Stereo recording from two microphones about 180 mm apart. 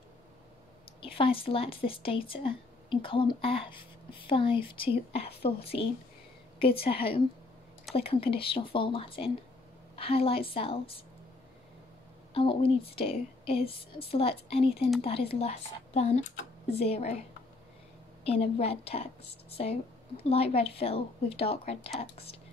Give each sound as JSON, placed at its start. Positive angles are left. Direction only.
{"t": 1.0, "sound": "a woman's voice", "side_deg": 30}
{"t": 6.9, "sound": "speech", "side_deg": 30}
{"t": 12.4, "sound": "speech", "side_deg": 30}
{"t": 18.2, "sound": "speech", "side_deg": 35}